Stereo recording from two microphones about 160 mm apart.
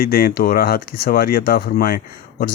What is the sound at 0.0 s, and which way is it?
Speech, 65° left (ahead or behind).